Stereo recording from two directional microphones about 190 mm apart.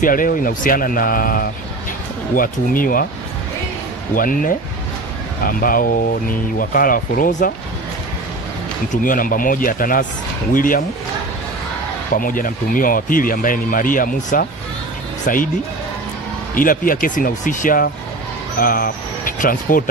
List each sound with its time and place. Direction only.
0.0 s speech: 45° left (ahead or behind)
4.1 s speech: 45° left (ahead or behind)
8.9 s speech: 45° left (ahead or behind)
12.1 s speech: 45° left (ahead or behind)
16.5 s speech: 45° left (ahead or behind)